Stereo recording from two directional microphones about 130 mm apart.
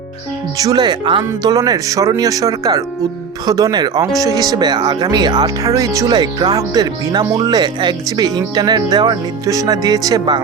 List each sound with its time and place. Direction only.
0.5 s speech: 30° right (ahead or behind)